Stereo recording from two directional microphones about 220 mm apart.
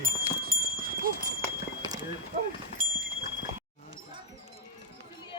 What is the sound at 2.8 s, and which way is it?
Horse, 40° right (ahead or behind).